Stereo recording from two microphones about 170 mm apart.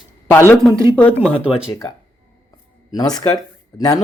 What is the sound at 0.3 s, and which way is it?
Speech, 15° left (ahead or behind).